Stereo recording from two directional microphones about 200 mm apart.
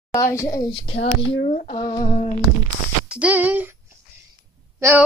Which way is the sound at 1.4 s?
35° left (ahead or behind).